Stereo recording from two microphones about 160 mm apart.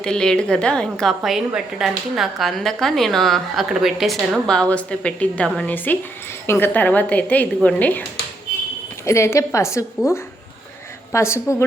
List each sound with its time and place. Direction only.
0.0 s a woman's voice: 5° left (ahead or behind)
9.0 s a woman's voice: 15° left (ahead or behind)